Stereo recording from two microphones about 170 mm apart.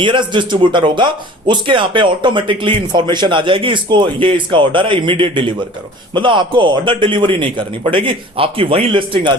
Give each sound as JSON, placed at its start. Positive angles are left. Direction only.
{"t": 0.0, "sound": "speech", "side_deg": -30}